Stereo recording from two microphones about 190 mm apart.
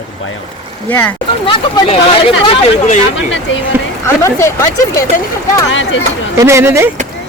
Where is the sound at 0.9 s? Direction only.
10° left (ahead or behind).